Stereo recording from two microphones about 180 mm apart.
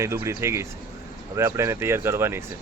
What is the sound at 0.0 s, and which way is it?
Speech, 15° right (ahead or behind).